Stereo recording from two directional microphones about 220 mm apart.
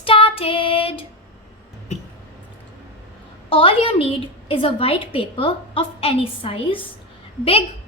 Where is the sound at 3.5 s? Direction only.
25° left (ahead or behind).